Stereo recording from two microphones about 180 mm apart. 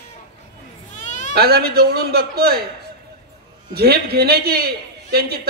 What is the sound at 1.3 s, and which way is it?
A man's voice, 60° right (ahead or behind).